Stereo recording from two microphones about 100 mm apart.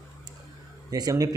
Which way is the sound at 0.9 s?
35° right (ahead or behind).